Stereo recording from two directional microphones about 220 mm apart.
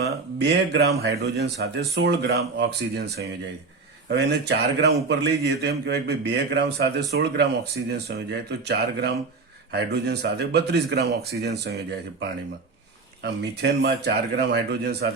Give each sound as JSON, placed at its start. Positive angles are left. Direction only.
{"t": 0.0, "sound": "a man's voice", "side_deg": -50}